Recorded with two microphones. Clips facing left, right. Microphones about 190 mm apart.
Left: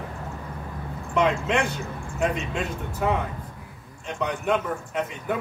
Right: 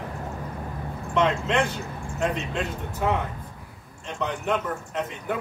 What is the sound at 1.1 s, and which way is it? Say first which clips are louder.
Speech: even; 10° left (ahead or behind).